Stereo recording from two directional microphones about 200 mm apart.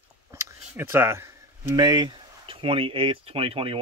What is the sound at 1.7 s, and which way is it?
Speech, 20° right (ahead or behind).